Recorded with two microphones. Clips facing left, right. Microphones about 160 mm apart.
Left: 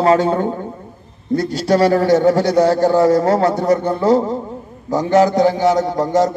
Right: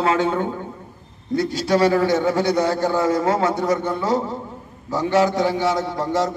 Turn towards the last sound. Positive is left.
turn(degrees=40)  # may be behind; listen again after turning